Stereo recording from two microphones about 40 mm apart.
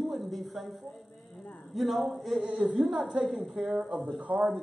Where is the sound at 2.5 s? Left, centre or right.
Right.